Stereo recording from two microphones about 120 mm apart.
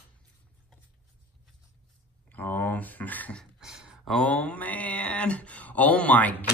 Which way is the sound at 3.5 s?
5° right (ahead or behind).